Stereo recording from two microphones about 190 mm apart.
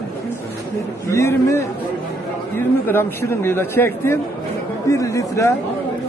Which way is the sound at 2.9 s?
10° left (ahead or behind).